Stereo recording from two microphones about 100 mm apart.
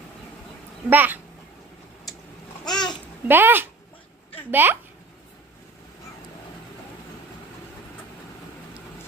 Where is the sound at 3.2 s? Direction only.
20° right (ahead or behind).